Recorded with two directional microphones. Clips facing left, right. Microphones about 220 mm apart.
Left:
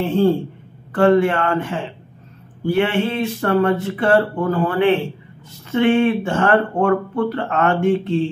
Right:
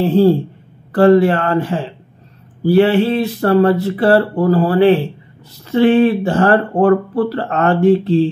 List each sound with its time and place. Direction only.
0.0 s speech: 35° right (ahead or behind)